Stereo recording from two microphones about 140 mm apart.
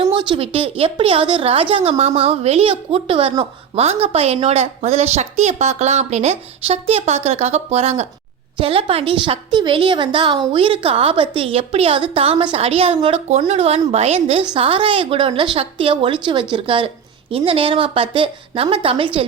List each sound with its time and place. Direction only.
0.0 s a woman's voice: 35° right (ahead or behind)